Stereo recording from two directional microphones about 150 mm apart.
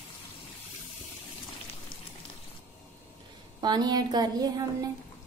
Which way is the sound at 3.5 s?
30° right (ahead or behind).